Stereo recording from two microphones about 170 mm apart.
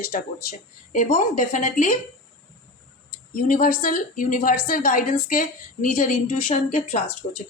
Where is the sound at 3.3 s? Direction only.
50° left (ahead or behind).